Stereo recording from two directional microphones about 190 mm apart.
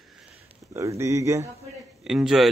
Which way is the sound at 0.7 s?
15° right (ahead or behind).